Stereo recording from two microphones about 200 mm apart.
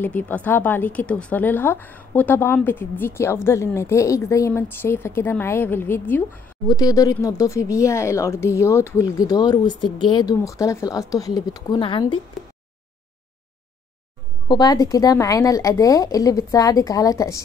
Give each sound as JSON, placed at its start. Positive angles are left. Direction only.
{"t": 0.0, "sound": "a woman's voice", "side_deg": 10}
{"t": 14.5, "sound": "a woman's voice", "side_deg": 20}